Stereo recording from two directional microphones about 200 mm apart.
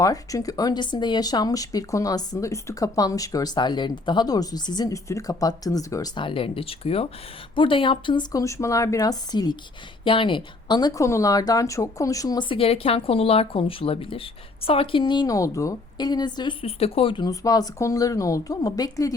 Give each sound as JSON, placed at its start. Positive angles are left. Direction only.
{"t": 0.0, "sound": "speech", "side_deg": 15}